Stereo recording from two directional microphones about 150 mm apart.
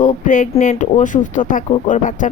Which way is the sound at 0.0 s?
60° left (ahead or behind).